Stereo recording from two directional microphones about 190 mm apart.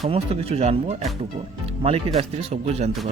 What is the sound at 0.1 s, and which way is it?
Speech, 30° right (ahead or behind).